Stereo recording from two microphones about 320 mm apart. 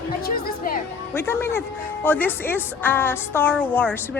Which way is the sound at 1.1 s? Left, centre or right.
Centre.